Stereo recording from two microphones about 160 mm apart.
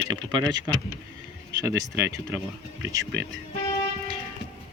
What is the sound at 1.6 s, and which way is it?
Speech, 15° right (ahead or behind).